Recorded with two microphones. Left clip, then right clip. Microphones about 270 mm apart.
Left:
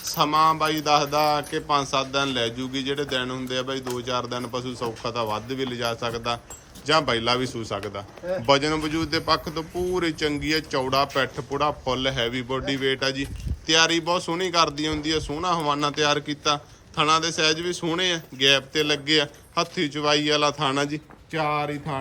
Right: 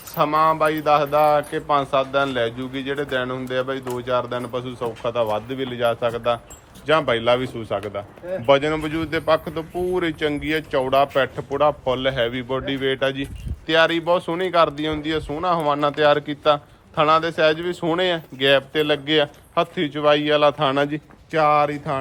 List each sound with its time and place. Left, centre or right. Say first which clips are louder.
0.1 s a man's voice: right 2 dB; centre